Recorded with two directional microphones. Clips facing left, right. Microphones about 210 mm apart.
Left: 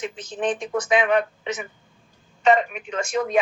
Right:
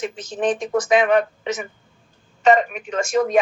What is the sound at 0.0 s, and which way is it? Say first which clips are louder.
A woman's voice: right 3 dB; 45° right (ahead or behind).